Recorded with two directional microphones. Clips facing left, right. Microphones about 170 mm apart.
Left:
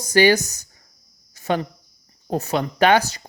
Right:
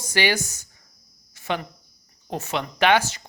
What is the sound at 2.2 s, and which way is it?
Speech, 40° left (ahead or behind).